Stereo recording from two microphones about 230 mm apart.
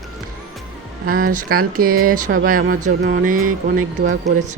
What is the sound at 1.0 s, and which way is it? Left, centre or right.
Speech, right.